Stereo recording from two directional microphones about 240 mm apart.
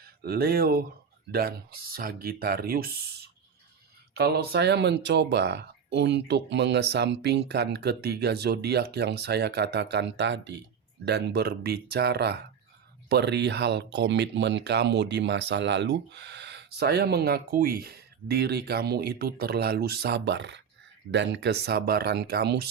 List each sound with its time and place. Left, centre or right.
0.0 s speech: right
4.1 s speech: right